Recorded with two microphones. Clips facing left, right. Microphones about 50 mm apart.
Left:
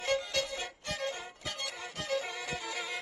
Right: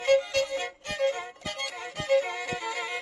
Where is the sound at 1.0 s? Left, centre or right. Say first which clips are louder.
Right 13 dB; right.